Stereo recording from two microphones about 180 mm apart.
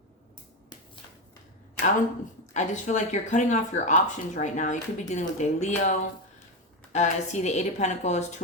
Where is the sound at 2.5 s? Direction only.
40° left (ahead or behind).